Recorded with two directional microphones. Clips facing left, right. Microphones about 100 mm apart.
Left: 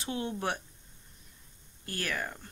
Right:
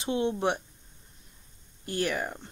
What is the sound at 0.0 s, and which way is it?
Speech, 20° right (ahead or behind).